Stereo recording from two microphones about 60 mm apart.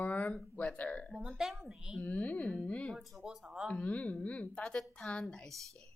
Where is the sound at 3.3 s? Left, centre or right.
Centre.